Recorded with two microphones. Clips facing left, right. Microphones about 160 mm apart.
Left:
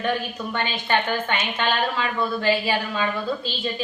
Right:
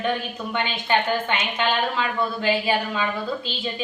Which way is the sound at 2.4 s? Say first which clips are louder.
Right 1 dB; 15° right (ahead or behind).